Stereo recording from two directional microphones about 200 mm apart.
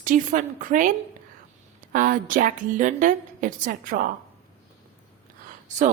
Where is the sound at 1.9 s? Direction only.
40° right (ahead or behind).